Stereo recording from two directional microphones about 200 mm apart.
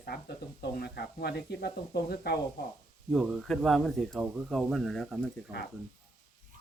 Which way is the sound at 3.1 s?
Centre (ahead or behind).